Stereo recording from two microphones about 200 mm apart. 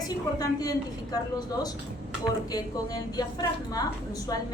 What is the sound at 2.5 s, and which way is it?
A woman's voice, 20° left (ahead or behind).